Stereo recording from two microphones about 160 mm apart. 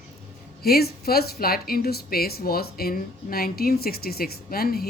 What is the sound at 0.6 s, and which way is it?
Speech, 75° left (ahead or behind).